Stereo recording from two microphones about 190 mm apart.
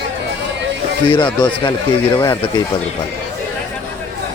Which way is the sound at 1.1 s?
25° left (ahead or behind).